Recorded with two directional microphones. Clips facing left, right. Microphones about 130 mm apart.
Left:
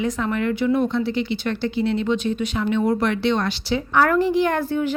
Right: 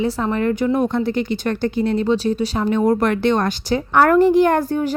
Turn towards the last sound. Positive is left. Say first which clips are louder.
# right 4 dB
turn(degrees=-45)  # may be behind; listen again after turning